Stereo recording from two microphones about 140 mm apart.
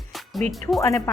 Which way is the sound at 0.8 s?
20° left (ahead or behind).